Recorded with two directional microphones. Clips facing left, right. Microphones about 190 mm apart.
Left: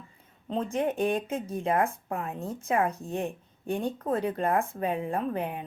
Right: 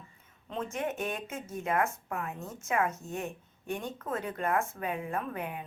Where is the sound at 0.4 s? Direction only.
35° left (ahead or behind).